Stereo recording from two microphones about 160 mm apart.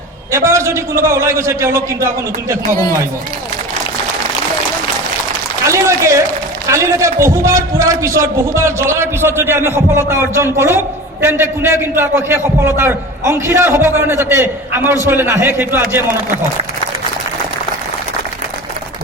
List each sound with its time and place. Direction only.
0.3 s a man's voice: 15° right (ahead or behind)
5.6 s a sound: 20° right (ahead or behind)
6.7 s a man's voice: 15° right (ahead or behind)